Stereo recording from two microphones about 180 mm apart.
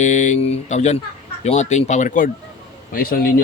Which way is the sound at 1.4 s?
40° left (ahead or behind).